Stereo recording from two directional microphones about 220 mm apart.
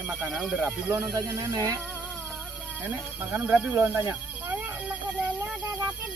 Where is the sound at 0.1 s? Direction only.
5° right (ahead or behind).